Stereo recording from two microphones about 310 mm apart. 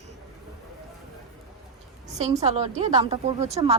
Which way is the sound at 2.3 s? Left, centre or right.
Centre.